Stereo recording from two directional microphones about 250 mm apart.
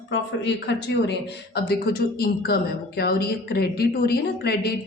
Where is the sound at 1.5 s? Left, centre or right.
Left.